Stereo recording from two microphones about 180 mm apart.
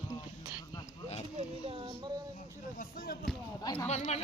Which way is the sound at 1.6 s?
30° right (ahead or behind).